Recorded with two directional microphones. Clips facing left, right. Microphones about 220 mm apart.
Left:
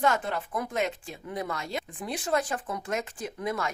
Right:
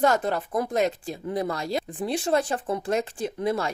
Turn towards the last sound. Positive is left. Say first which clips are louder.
# right 6 dB
turn(degrees=-30)  # may be behind; listen again after turning